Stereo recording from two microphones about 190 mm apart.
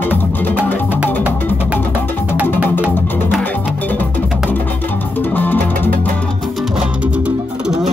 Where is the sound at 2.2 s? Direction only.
5° right (ahead or behind).